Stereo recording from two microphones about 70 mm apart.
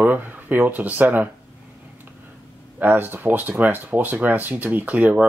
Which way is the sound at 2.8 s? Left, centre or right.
Right.